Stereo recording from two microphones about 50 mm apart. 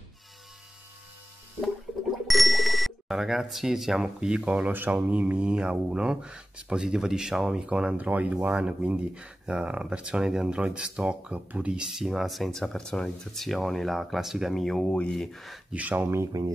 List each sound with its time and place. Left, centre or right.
2.2 s speech: centre
14.5 s speech: centre
15.7 s speech: right